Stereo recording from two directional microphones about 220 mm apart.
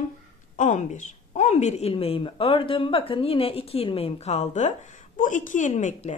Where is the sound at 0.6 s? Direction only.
35° left (ahead or behind).